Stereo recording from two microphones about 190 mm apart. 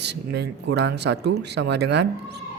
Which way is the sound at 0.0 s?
60° right (ahead or behind).